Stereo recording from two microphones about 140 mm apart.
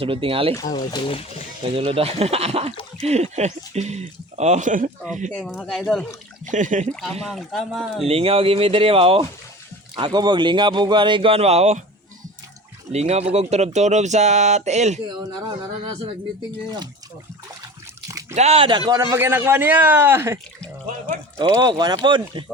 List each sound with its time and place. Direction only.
0.0 s speech: 40° right (ahead or behind)
0.5 s speech: 25° left (ahead or behind); by 1.5 s 45° left (ahead or behind)
1.7 s speech: 40° right (ahead or behind); by 4.9 s 65° right (ahead or behind)
5.5 s speech: centre (ahead or behind)
6.5 s speech: 65° right (ahead or behind)
7.2 s speech: centre (ahead or behind)
8.0 s speech: 45° right (ahead or behind)
12.9 s speech: 50° right (ahead or behind)
16.6 s speech: 30° right (ahead or behind)
18.3 s speech: 45° right (ahead or behind)
18.9 s a man's voice: 20° right (ahead or behind)
21.5 s speech: 30° right (ahead or behind)